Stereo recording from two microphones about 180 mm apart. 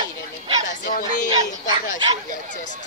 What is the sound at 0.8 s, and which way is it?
Speech, 50° left (ahead or behind).